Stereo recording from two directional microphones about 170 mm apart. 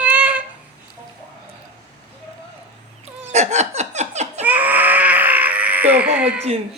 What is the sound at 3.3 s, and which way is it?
Laughter, 40° right (ahead or behind).